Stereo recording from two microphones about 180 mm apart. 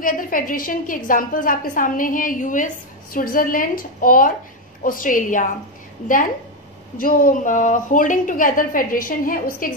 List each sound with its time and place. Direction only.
0.0 s a woman's voice: 50° left (ahead or behind)
7.0 s a woman's voice: 50° left (ahead or behind)